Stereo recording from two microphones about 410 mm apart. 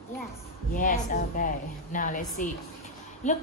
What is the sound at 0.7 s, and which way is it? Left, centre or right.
A woman's voice, centre.